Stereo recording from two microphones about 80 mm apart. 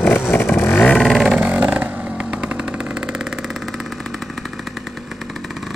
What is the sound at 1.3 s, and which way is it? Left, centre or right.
Vehicle, centre.